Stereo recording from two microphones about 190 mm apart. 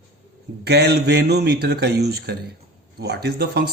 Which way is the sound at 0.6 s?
60° right (ahead or behind).